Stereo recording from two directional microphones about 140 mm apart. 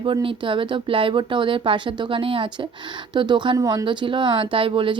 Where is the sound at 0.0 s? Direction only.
40° right (ahead or behind).